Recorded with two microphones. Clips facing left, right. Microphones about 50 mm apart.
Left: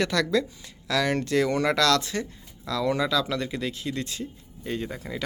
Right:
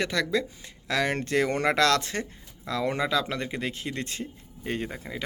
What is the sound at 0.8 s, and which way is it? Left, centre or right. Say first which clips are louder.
Speech: left 2 dB; right.